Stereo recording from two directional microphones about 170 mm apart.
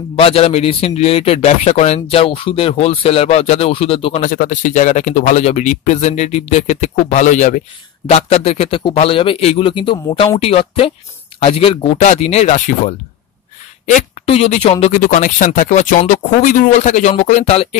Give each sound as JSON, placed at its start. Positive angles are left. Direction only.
{"t": 0.1, "sound": "a man's voice", "side_deg": 35}
{"t": 13.9, "sound": "speech", "side_deg": 40}